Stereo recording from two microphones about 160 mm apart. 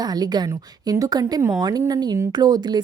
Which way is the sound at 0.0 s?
25° right (ahead or behind).